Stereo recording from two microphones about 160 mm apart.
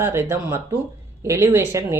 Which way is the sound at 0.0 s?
15° right (ahead or behind).